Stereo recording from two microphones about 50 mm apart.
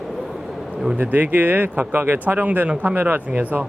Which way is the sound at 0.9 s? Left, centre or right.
Right.